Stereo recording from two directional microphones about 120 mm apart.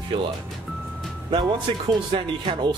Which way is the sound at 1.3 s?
45° right (ahead or behind).